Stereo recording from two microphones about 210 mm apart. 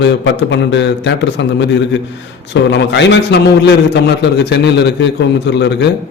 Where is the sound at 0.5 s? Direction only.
60° left (ahead or behind).